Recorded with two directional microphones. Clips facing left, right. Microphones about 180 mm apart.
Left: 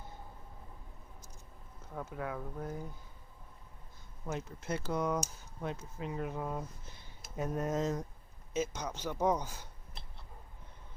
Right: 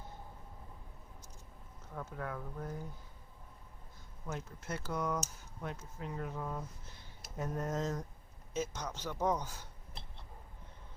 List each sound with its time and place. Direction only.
2.0 s a man's voice: 10° left (ahead or behind)
4.3 s a man's voice: 20° left (ahead or behind)